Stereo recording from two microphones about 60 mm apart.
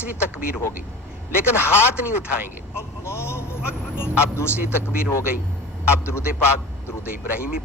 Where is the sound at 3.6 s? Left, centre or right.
Left.